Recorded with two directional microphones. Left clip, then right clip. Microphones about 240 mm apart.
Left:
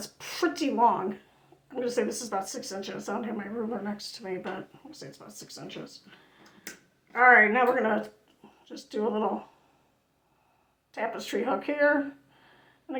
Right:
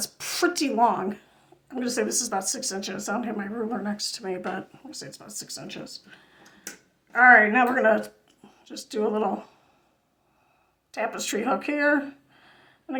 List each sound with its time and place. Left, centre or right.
0.0 s a woman's voice: right
10.9 s speech: right